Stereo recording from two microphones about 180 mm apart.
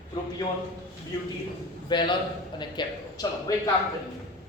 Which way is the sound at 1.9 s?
25° left (ahead or behind).